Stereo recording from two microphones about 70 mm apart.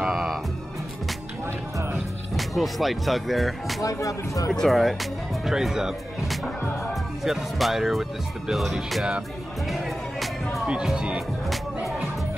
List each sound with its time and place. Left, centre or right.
0.0 s music: centre
2.3 s speech: centre
3.8 s speech: left
4.5 s speech: centre
9.7 s music: centre
10.7 s speech: centre
11.4 s music: centre